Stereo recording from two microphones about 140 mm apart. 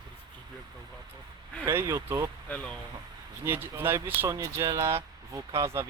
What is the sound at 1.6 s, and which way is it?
Speech, 20° right (ahead or behind).